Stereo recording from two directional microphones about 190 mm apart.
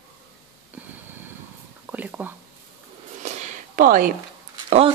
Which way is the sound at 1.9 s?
10° right (ahead or behind).